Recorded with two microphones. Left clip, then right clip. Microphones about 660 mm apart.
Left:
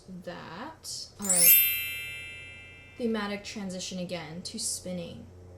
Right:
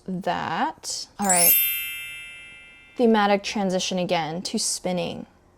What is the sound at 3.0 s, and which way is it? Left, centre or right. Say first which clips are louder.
A woman's voice: right 13 dB; right.